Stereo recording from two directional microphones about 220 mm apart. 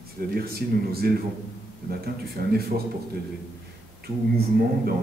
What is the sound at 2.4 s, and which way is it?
Speech, 40° right (ahead or behind).